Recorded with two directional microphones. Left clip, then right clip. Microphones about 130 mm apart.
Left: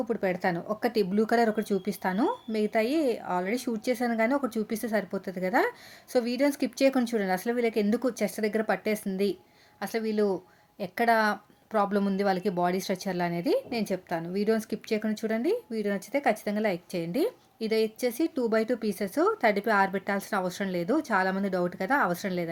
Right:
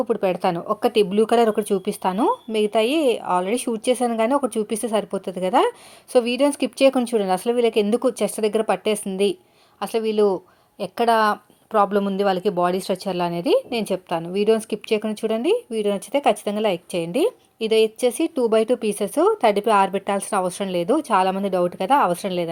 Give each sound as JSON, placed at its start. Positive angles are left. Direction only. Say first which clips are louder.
{"t": 0.0, "sound": "speech", "louder": "right 8 dB", "side_deg": -15}